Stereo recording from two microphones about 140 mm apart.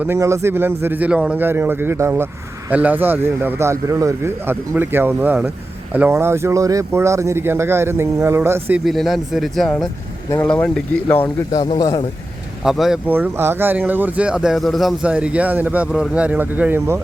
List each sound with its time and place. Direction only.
0.0 s a man's voice: 20° right (ahead or behind)
8.8 s speech: centre (ahead or behind)
11.8 s speech: 30° left (ahead or behind)
12.6 s speech: centre (ahead or behind)
13.1 s a man's voice: 15° right (ahead or behind)